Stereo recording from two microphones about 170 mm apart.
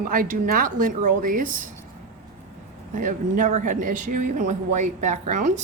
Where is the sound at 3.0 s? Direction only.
50° right (ahead or behind).